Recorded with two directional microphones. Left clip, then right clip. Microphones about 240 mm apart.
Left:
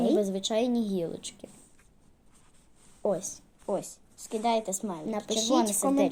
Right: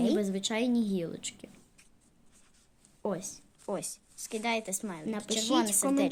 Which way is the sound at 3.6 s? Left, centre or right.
Right.